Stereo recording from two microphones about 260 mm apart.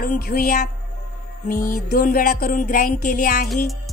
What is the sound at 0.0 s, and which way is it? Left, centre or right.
Music, left.